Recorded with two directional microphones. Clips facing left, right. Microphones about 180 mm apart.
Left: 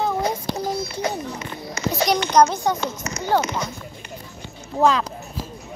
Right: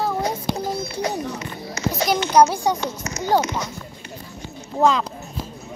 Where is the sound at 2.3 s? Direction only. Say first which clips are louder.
Right 2 dB; 10° right (ahead or behind).